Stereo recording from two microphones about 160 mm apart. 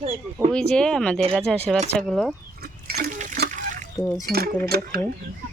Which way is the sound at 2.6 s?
80° right.